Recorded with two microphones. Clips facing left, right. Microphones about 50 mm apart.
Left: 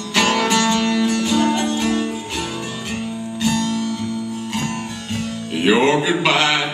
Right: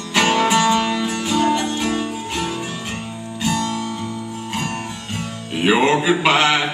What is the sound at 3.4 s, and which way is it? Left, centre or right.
Music, centre.